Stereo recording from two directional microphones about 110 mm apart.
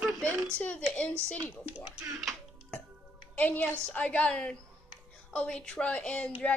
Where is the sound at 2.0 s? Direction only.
5° right (ahead or behind).